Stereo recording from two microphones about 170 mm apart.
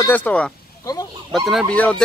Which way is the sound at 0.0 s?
10° left (ahead or behind).